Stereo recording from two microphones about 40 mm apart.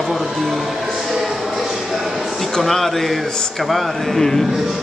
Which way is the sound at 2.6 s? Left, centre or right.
Centre.